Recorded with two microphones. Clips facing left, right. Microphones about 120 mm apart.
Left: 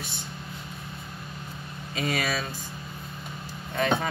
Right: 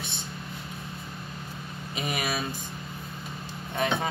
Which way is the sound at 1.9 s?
20° right (ahead or behind).